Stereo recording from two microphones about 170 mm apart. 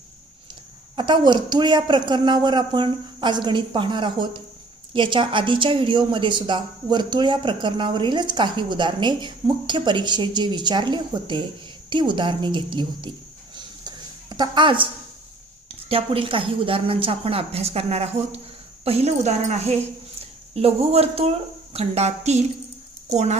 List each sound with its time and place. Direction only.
0.9 s a woman's voice: 25° right (ahead or behind)
13.6 s a sound: 25° right (ahead or behind)
15.9 s a woman's voice: 35° right (ahead or behind)